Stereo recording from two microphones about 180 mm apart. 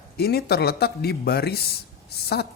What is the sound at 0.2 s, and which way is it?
Speech, 60° left (ahead or behind).